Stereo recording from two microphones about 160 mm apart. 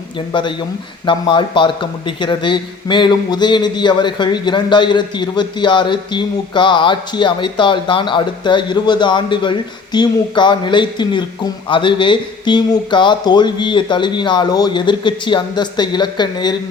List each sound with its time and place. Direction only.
0.3 s a man's voice: 30° left (ahead or behind)